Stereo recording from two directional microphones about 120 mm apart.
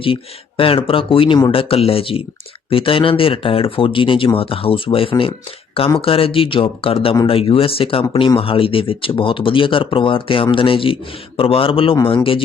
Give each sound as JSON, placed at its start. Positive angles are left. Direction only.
{"t": 0.0, "sound": "speech", "side_deg": 45}